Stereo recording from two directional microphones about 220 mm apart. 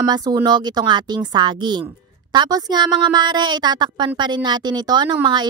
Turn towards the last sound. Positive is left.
turn(degrees=-20)  # may be behind; listen again after turning